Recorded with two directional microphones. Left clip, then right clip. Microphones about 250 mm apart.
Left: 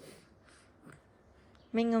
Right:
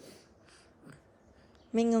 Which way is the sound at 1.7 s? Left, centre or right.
Centre.